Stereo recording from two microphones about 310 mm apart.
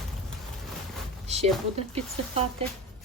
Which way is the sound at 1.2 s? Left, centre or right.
Right.